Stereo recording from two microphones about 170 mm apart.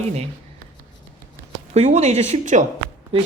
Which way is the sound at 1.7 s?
40° right (ahead or behind).